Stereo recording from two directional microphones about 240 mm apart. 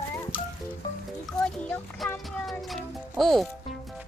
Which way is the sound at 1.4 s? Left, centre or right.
Centre.